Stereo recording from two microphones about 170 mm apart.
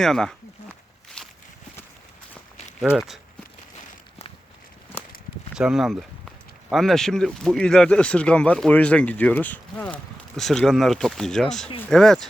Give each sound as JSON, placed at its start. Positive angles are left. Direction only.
{"t": 0.0, "sound": "speech", "side_deg": 5}
{"t": 1.2, "sound": "walk", "side_deg": 5}
{"t": 2.8, "sound": "speech", "side_deg": -5}
{"t": 5.5, "sound": "speech", "side_deg": -5}